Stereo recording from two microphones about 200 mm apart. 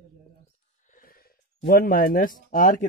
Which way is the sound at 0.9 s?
45° left (ahead or behind).